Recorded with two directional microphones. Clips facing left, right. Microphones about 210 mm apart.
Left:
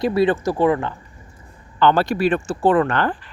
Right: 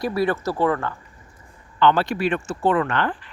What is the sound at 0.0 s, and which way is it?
Speech, 25° left (ahead or behind).